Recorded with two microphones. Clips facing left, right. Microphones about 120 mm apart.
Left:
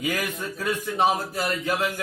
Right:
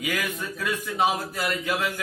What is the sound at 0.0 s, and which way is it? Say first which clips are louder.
A man's voice: left 1 dB; 30° left (ahead or behind).